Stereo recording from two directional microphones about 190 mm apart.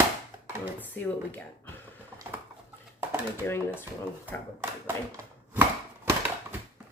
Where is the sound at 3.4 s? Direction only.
10° left (ahead or behind).